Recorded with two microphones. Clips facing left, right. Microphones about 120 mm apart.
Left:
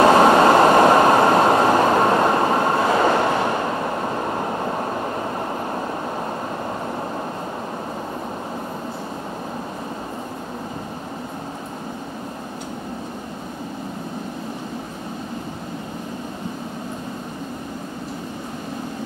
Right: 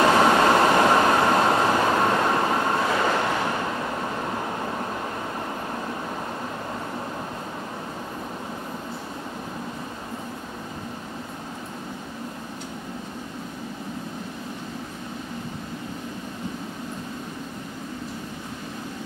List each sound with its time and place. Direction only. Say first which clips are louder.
0.0 s train: left 5 dB; 30° left (ahead or behind)